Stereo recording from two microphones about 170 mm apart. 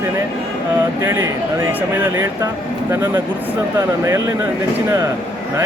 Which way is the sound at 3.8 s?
15° right (ahead or behind).